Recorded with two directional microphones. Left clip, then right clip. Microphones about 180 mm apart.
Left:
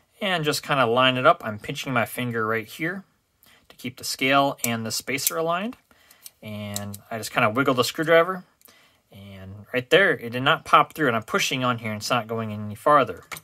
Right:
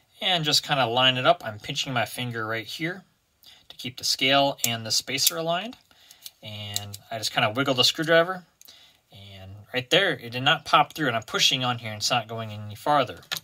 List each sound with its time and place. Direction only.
0.2 s speech: 40° left (ahead or behind)